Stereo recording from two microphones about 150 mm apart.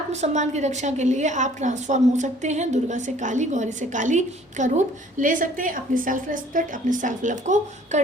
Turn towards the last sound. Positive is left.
turn(degrees=-55)  # may be behind; listen again after turning